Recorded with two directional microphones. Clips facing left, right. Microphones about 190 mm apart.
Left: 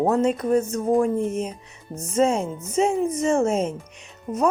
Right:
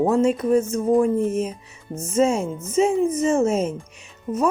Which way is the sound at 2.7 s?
5° right (ahead or behind).